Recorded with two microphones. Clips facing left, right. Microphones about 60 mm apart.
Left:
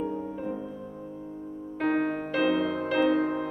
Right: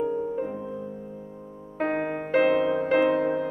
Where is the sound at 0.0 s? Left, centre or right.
Centre.